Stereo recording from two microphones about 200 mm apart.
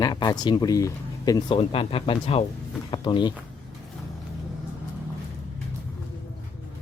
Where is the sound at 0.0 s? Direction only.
20° left (ahead or behind).